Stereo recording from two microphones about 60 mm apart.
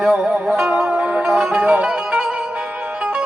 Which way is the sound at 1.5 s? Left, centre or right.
Centre.